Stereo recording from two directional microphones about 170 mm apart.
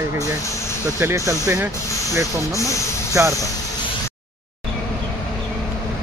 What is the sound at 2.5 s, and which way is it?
Speech, 20° left (ahead or behind).